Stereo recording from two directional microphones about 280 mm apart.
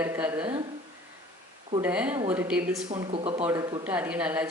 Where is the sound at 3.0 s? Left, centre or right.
Centre.